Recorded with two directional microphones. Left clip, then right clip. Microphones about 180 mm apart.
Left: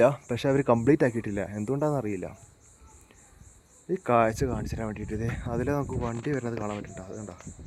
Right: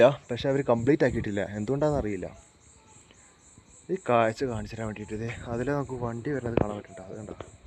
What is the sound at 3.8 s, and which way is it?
Speech, 20° left (ahead or behind).